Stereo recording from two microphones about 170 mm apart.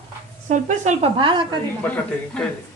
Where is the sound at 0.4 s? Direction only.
45° right (ahead or behind); by 1.5 s 30° right (ahead or behind).